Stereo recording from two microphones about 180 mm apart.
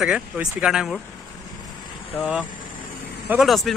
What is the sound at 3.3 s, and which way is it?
Speech, centre (ahead or behind).